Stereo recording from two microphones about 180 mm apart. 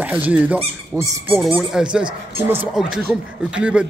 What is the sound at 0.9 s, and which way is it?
Speech, 20° right (ahead or behind).